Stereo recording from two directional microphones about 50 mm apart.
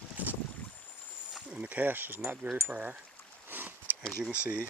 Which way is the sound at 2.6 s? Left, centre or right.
Right.